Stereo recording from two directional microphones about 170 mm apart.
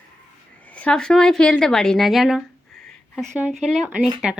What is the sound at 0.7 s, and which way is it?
A woman's voice, 5° left (ahead or behind).